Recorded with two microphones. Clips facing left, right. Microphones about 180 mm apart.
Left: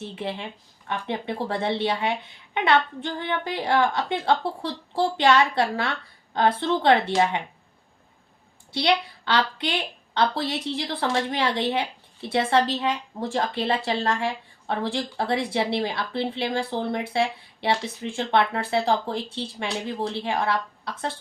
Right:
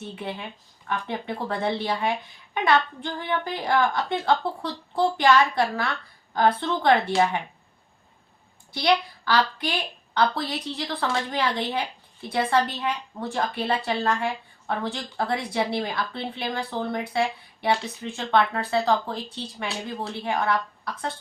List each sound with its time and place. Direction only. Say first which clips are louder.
0.2 s speech: left 4 dB; 25° left (ahead or behind)
8.7 s a woman's voice: even; 25° left (ahead or behind)